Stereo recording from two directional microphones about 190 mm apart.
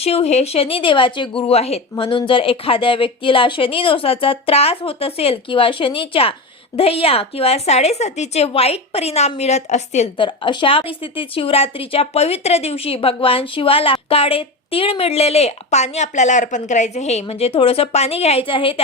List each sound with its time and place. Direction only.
0.0 s a woman's voice: 30° left (ahead or behind)
10.2 s a woman's voice: 25° left (ahead or behind)